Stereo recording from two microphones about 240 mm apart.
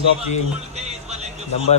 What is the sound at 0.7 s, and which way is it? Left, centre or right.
Music, right.